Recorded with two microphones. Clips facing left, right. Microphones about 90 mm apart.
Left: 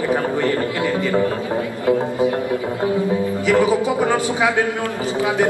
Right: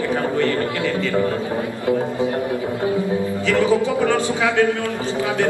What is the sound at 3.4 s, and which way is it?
A man's voice, 15° left (ahead or behind).